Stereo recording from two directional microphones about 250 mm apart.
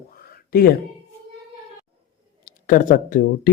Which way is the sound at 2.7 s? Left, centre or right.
Left.